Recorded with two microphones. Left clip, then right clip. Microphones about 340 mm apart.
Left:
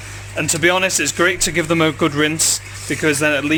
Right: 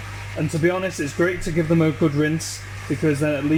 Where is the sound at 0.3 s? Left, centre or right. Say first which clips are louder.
Left 6 dB; left.